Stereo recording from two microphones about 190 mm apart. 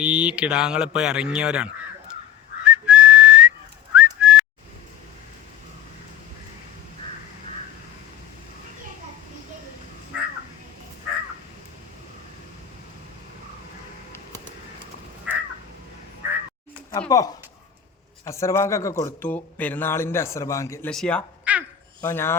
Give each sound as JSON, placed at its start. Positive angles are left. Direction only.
{"t": 0.0, "sound": "speech", "side_deg": -5}
{"t": 2.6, "sound": "whistling", "side_deg": -5}
{"t": 10.1, "sound": "crow", "side_deg": -5}
{"t": 14.1, "sound": "a sound", "side_deg": 10}
{"t": 15.3, "sound": "crow", "side_deg": -5}
{"t": 17.1, "sound": "speech", "side_deg": 20}
{"t": 20.9, "sound": "speech", "side_deg": 5}
{"t": 21.5, "sound": "babbling", "side_deg": -5}
{"t": 22.0, "sound": "speech", "side_deg": 15}